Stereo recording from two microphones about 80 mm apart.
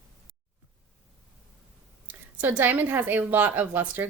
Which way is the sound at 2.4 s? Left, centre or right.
Right.